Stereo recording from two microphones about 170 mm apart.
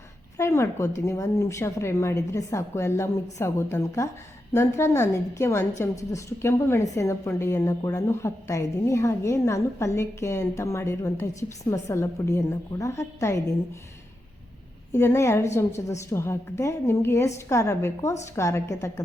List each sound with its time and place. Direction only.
0.3 s a woman's voice: 15° left (ahead or behind)
14.9 s a woman's voice: 15° left (ahead or behind)